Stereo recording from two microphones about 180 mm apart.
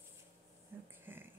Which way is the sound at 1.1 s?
10° right (ahead or behind).